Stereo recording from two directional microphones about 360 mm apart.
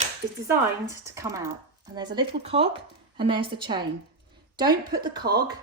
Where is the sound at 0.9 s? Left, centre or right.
Centre.